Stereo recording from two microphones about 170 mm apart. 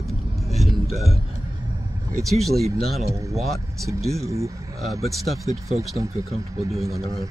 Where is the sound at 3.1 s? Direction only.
20° right (ahead or behind).